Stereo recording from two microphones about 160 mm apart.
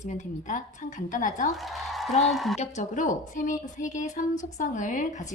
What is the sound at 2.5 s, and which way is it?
Speech, 45° left (ahead or behind).